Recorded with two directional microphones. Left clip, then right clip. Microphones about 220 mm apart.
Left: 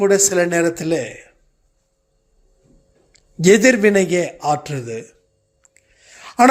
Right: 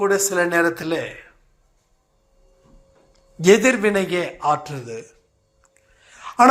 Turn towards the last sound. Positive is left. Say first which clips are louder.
# left 1 dB
turn(degrees=50)  # may be behind; listen again after turning